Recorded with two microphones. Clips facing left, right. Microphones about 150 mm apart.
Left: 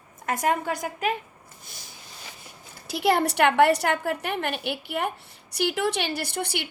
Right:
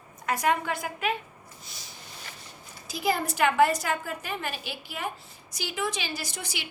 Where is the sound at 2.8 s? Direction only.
65° left (ahead or behind).